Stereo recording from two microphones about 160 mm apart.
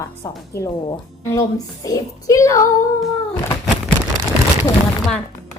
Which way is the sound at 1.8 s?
20° left (ahead or behind).